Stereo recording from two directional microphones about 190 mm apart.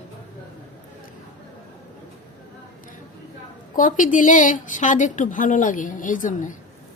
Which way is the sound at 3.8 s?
45° left (ahead or behind).